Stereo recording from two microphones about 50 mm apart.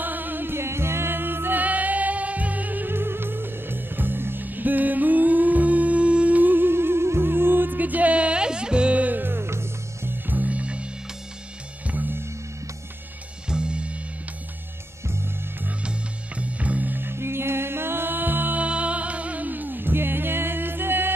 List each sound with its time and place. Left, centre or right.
0.0 s music: right
0.6 s music: right
1.6 s music: right
9.2 s music: right
10.2 s music: right
13.5 s music: centre
15.8 s music: right
17.1 s music: right
18.6 s music: right